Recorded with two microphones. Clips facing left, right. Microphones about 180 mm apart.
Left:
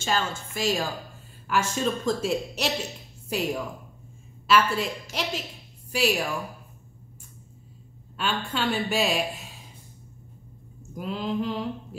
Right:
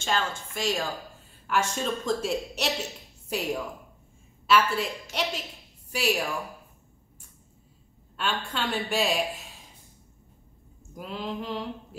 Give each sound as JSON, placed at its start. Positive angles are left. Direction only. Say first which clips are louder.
{"t": 0.0, "sound": "speech", "louder": "left 1 dB", "side_deg": 5}
{"t": 8.2, "sound": "speech", "louder": "left 2 dB", "side_deg": 0}
{"t": 11.0, "sound": "speech", "louder": "left 5 dB", "side_deg": 0}